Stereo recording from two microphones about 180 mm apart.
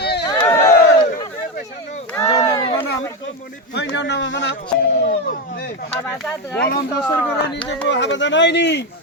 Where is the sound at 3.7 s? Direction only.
75° left (ahead or behind).